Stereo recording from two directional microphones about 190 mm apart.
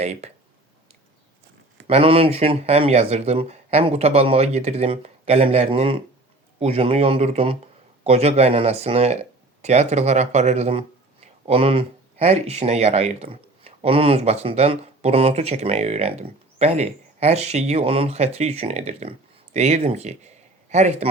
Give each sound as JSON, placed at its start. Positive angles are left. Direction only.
{"t": 0.0, "sound": "speech", "side_deg": -35}
{"t": 1.9, "sound": "speech", "side_deg": -30}